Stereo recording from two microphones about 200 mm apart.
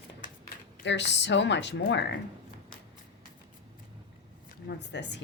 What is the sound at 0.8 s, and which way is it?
Speech, 60° left (ahead or behind).